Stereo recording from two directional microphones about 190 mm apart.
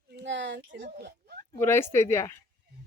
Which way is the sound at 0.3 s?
70° right (ahead or behind).